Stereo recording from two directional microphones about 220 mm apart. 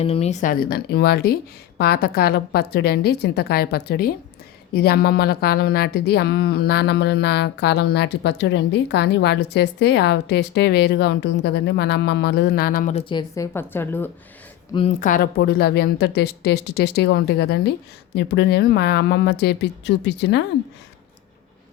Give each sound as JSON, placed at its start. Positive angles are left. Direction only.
{"t": 0.0, "sound": "a woman's voice", "side_deg": 25}
{"t": 14.7, "sound": "a woman's voice", "side_deg": 25}
{"t": 15.0, "sound": "a woman's voice", "side_deg": 40}